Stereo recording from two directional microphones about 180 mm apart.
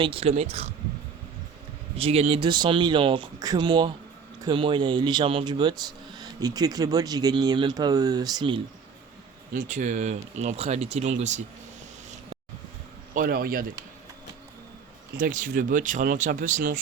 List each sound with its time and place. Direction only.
0.0 s speech: 30° right (ahead or behind)
2.0 s speech: 30° right (ahead or behind)
9.6 s speech: 45° right (ahead or behind)
13.1 s speech: 55° right (ahead or behind)
15.2 s speech: 45° right (ahead or behind)